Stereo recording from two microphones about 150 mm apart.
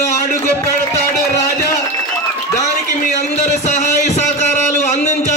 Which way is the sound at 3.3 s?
50° left (ahead or behind).